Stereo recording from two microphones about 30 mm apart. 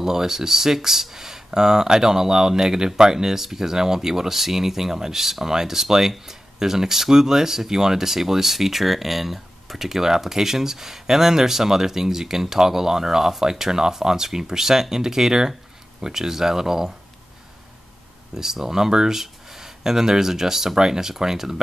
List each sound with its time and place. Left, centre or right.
0.0 s speech: centre
18.3 s speech: centre